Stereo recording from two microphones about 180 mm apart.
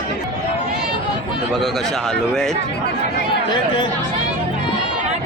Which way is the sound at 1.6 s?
Centre (ahead or behind).